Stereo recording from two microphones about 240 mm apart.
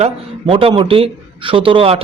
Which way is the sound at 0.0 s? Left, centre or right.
Right.